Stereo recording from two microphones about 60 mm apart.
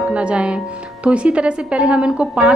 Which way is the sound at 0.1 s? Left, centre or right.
Centre.